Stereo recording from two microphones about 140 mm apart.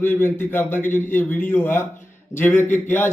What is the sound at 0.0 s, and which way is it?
A man's voice, 15° left (ahead or behind).